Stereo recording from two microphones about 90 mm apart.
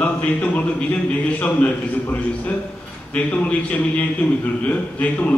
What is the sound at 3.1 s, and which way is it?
A man's voice, 15° left (ahead or behind).